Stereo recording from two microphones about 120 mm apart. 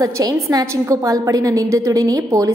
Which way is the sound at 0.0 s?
30° right (ahead or behind).